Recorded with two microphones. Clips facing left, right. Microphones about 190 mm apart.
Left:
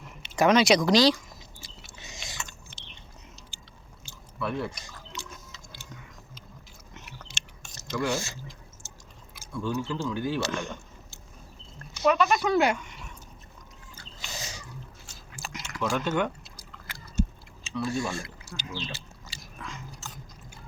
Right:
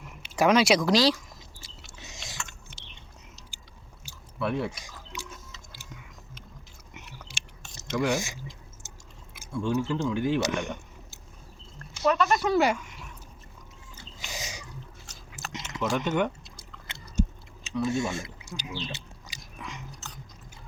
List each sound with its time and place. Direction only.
0.0 s chewing: 10° right (ahead or behind)
4.6 s drip: 10° right (ahead or behind)
6.9 s chewing: 10° right (ahead or behind)
7.9 s speech: 15° right (ahead or behind)
12.0 s speech: 5° left (ahead or behind)
14.2 s a sound: 15° right (ahead or behind)
15.5 s chewing: 20° right (ahead or behind)
17.7 s speech: 20° right (ahead or behind)
18.9 s biting: 20° right (ahead or behind)